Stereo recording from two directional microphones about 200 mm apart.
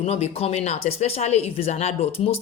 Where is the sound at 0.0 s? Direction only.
30° left (ahead or behind).